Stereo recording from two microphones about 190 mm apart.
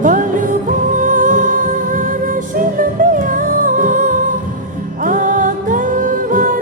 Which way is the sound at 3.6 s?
45° right (ahead or behind).